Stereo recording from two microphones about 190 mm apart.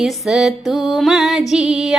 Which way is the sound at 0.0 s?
Centre (ahead or behind).